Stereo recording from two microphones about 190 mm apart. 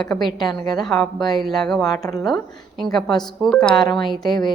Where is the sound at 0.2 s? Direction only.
25° left (ahead or behind).